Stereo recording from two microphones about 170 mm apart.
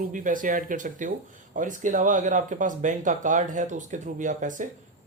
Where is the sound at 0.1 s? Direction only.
50° right (ahead or behind).